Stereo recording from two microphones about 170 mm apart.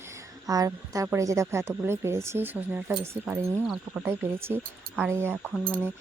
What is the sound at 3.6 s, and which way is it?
Speech, centre (ahead or behind).